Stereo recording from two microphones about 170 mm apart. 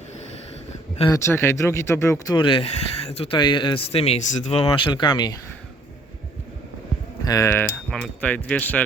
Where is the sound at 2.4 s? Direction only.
30° left (ahead or behind).